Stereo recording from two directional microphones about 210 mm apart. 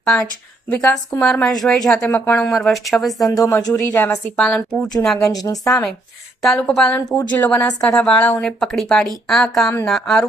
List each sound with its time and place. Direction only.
0.0 s a woman's voice: 5° left (ahead or behind)
3.2 s a woman's voice: 15° left (ahead or behind)
5.3 s a woman's voice: 15° left (ahead or behind)
6.4 s a woman's voice: 5° left (ahead or behind)